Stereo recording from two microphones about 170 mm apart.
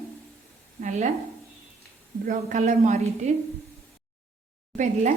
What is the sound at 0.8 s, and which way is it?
Sizzle, 45° right (ahead or behind).